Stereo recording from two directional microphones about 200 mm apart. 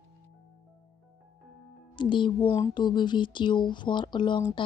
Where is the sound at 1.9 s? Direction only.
25° left (ahead or behind).